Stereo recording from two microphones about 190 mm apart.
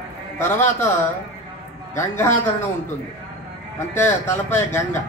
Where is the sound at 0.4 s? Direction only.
15° left (ahead or behind).